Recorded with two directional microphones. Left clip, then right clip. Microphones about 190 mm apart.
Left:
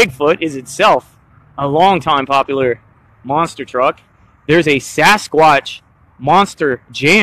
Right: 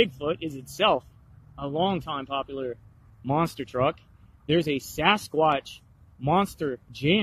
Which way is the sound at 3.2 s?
15° right (ahead or behind).